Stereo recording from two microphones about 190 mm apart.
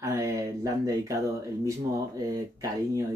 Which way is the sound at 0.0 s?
15° right (ahead or behind).